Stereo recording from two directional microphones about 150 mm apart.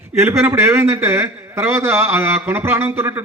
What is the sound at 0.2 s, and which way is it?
A man's voice, 15° right (ahead or behind).